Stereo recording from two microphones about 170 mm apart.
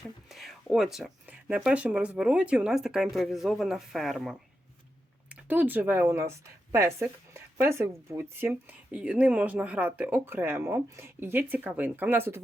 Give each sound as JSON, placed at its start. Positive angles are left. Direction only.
{"t": 0.3, "sound": "speech", "side_deg": 0}